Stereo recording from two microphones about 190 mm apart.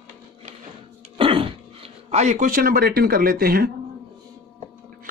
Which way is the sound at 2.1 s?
35° right (ahead or behind).